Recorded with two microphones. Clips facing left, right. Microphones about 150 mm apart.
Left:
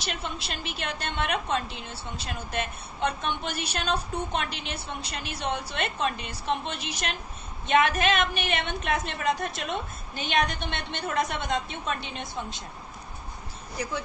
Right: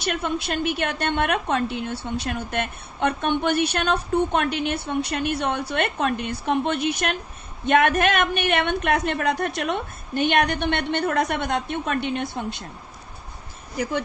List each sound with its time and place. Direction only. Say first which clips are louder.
0.0 s a woman's voice: right 9 dB; 55° right (ahead or behind)